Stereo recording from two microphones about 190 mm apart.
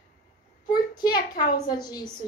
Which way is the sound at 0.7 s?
20° left (ahead or behind).